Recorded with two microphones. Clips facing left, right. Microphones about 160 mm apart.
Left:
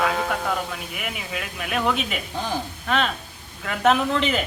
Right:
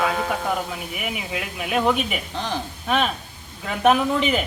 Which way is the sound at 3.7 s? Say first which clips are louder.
Right 2 dB; 10° right (ahead or behind).